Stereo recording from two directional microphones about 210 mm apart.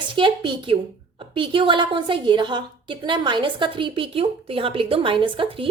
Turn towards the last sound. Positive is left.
turn(degrees=-25)  # may be behind; listen again after turning